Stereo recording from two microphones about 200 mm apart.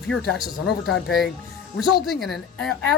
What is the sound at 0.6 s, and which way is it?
Speech, 65° left (ahead or behind).